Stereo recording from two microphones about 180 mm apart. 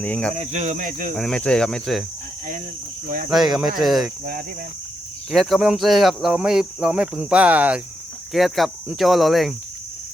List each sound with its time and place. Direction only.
0.0 s speech: 5° left (ahead or behind)
0.3 s speech: 40° right (ahead or behind)
1.1 s speech: 5° left (ahead or behind)
3.2 s speech: 5° right (ahead or behind)
5.3 s speech: centre (ahead or behind)